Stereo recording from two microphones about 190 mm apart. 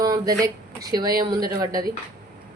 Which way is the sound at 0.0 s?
20° right (ahead or behind).